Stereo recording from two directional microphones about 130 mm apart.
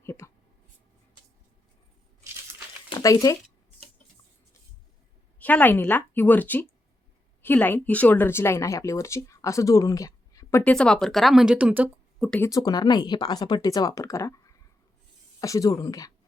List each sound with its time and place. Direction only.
0.0 s writing: 20° left (ahead or behind)
2.9 s speech: 25° left (ahead or behind)
5.4 s a woman's voice: 10° left (ahead or behind)
10.6 s speech: 5° left (ahead or behind); by 11.9 s 10° right (ahead or behind)
12.4 s speech: 25° left (ahead or behind)